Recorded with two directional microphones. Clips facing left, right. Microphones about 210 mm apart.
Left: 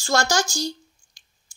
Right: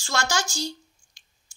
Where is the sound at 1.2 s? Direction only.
35° left (ahead or behind).